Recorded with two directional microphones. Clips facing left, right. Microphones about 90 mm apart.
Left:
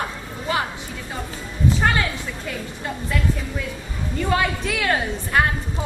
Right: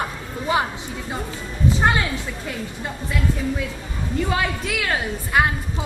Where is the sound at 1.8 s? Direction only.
20° right (ahead or behind).